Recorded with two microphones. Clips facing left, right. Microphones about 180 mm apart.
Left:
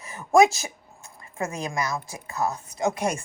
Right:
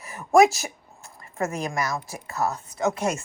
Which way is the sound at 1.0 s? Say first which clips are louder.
Right 3 dB; 15° left (ahead or behind).